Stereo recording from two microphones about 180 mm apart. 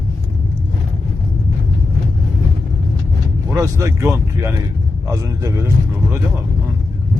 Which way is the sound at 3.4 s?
20° right (ahead or behind).